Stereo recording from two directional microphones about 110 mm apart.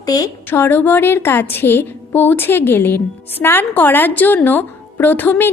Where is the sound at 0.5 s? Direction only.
20° left (ahead or behind).